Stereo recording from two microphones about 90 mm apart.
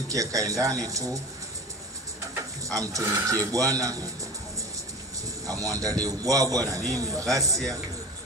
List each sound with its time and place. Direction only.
0.1 s speech: 40° right (ahead or behind)
2.3 s speech: 40° right (ahead or behind)
5.5 s speech: 40° right (ahead or behind)